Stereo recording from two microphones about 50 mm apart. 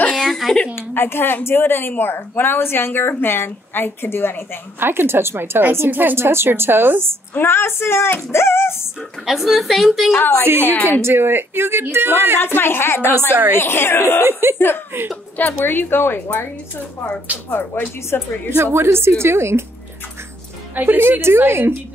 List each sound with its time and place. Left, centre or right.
0.1 s a sound: centre
0.7 s speech: left
4.7 s a woman's voice: right
6.1 s a woman's voice: right
7.3 s speech: left
9.2 s a woman's voice: centre
10.6 s a woman's voice: left
10.9 s a woman's voice: right
12.4 s speech: left
14.2 s a woman's voice: right
15.3 s speech: left
17.5 s speech: left
18.6 s a woman's voice: right
20.7 s a woman's voice: right